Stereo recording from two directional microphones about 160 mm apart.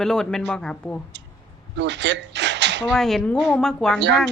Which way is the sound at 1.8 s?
90° right.